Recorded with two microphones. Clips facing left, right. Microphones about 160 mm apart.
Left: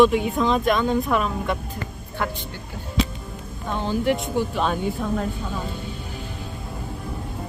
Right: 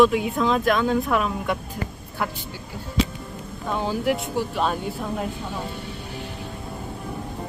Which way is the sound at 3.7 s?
5° right (ahead or behind).